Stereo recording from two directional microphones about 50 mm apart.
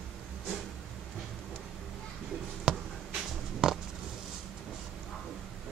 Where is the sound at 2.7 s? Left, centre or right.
Centre.